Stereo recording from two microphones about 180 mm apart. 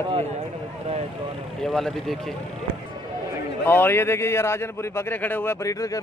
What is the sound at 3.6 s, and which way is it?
A man's voice, 10° left (ahead or behind).